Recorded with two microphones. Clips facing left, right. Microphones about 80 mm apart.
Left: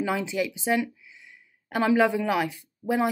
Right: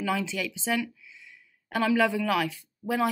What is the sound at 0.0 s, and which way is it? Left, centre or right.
Speech, left.